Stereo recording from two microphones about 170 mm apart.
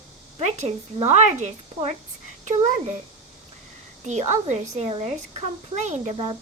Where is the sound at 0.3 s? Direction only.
40° right (ahead or behind).